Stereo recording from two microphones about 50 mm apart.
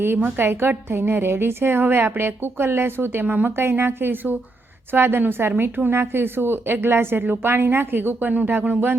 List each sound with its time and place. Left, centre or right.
0.0 s a woman's voice: right